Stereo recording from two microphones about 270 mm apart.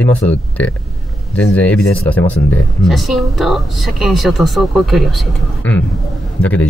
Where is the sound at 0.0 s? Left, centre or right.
Centre.